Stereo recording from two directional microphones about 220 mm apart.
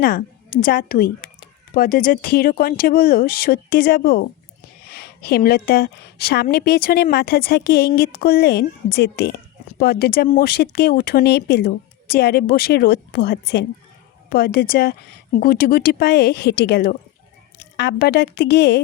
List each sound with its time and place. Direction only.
0.0 s a woman's voice: 40° left (ahead or behind)